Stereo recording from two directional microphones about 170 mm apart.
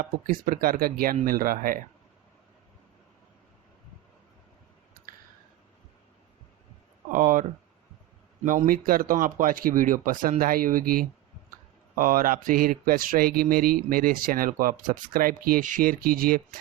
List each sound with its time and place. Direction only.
0.0 s speech: 55° right (ahead or behind)
7.1 s speech: 50° right (ahead or behind)
8.4 s speech: 50° right (ahead or behind)